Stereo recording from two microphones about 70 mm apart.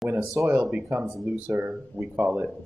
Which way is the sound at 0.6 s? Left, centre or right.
Right.